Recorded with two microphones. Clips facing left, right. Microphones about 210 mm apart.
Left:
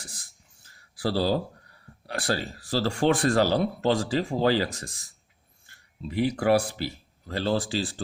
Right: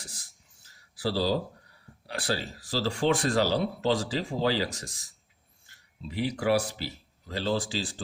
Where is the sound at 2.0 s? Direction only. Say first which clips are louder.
Left 3 dB; 50° left (ahead or behind).